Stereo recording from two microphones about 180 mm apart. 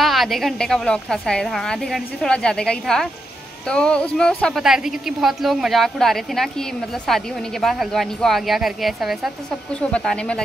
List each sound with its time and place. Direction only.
0.0 s a woman's voice: centre (ahead or behind)